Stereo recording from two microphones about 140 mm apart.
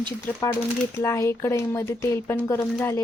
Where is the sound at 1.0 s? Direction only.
20° left (ahead or behind).